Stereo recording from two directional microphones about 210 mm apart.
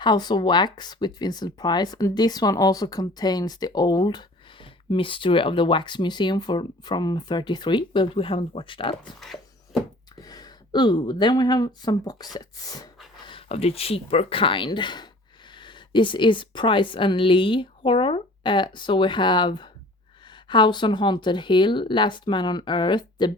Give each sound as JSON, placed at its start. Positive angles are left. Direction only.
{"t": 0.0, "sound": "speech", "side_deg": 20}
{"t": 10.2, "sound": "speech", "side_deg": 20}